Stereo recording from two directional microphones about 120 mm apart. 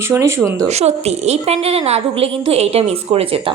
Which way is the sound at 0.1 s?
20° right (ahead or behind).